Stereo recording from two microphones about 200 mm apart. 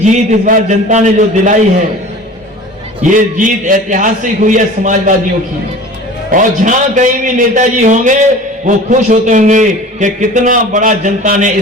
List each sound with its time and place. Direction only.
0.0 s a man's voice: 40° right (ahead or behind)
3.0 s a man's voice: 40° right (ahead or behind)
6.3 s a man's voice: 40° right (ahead or behind)